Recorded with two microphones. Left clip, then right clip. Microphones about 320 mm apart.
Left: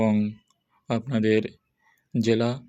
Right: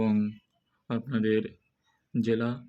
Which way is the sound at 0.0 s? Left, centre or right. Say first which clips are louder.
Left 5 dB; centre.